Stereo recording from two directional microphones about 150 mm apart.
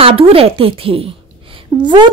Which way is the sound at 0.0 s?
40° right (ahead or behind).